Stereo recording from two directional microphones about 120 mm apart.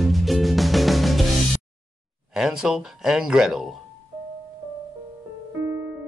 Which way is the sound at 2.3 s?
5° right (ahead or behind).